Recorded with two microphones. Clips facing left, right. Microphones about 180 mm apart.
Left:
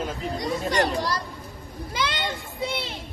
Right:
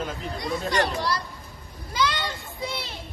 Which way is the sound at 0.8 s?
40° left (ahead or behind).